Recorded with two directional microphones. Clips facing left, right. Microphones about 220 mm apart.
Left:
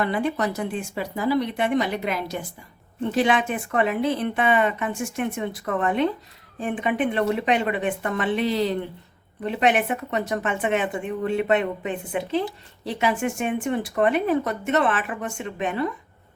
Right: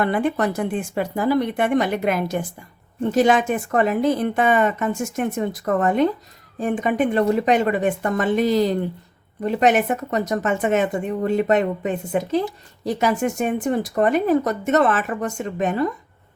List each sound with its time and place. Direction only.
0.0 s a woman's voice: 50° right (ahead or behind)